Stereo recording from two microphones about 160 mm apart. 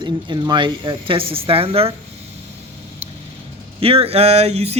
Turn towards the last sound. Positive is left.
turn(degrees=-40)  # may be behind; listen again after turning